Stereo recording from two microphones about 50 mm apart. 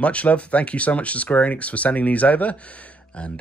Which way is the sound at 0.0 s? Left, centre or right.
Left.